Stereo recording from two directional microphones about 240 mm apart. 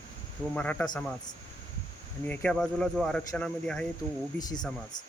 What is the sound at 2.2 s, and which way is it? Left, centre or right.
Speech, centre.